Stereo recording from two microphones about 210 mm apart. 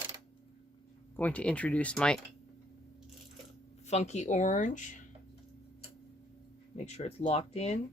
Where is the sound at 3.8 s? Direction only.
30° left (ahead or behind).